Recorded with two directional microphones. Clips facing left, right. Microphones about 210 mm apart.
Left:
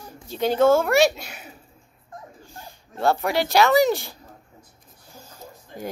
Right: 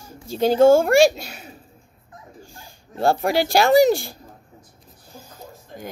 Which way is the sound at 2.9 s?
35° right (ahead or behind).